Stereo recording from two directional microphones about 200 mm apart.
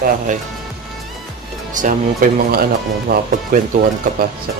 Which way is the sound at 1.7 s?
40° right (ahead or behind).